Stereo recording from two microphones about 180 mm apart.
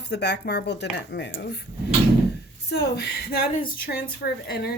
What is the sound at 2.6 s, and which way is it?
A woman's voice, 65° left (ahead or behind).